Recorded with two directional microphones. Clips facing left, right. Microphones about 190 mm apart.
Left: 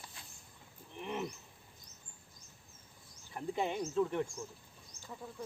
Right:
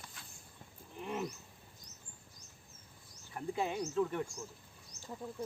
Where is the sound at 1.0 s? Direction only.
5° right (ahead or behind).